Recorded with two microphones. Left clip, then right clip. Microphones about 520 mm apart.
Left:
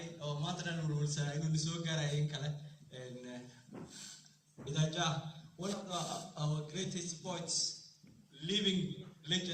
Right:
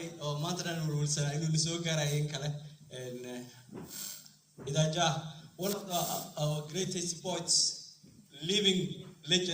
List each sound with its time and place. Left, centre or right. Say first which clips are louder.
0.0 s a man's voice: right 5 dB; centre
4.6 s a man's voice: right 7 dB; centre